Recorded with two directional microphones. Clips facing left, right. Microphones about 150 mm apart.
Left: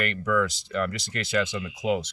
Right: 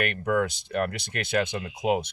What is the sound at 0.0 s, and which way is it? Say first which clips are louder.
Speech: even; 60° right (ahead or behind).